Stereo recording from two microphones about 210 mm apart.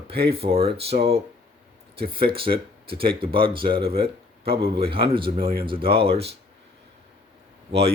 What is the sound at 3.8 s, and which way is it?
Speech, 45° right (ahead or behind).